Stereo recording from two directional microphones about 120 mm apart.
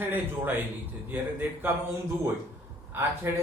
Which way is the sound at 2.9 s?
15° right (ahead or behind).